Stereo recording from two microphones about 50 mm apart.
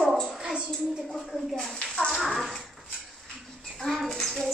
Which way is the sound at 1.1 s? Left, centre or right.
Centre.